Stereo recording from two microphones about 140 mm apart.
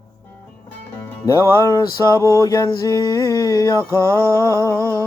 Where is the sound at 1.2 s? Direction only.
25° left (ahead or behind).